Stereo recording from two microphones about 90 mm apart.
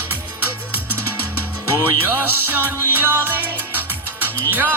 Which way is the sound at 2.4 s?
20° right (ahead or behind).